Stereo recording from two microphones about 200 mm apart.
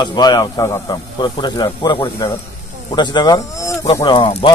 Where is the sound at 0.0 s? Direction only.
20° left (ahead or behind).